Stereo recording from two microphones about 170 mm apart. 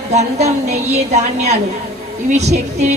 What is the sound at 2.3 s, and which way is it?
Speech, 40° right (ahead or behind).